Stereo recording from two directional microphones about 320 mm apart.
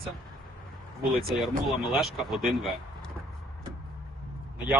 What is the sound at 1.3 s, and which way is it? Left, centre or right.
Speech, centre.